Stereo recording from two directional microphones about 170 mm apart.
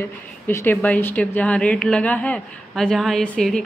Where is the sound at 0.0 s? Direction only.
15° left (ahead or behind).